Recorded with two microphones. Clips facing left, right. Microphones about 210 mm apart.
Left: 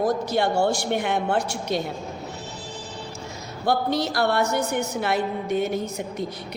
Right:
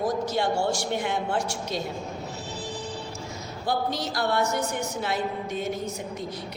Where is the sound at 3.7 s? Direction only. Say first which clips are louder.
Left 5 dB; 65° left (ahead or behind).